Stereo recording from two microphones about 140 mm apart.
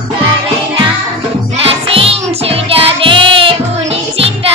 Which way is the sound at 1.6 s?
45° right (ahead or behind).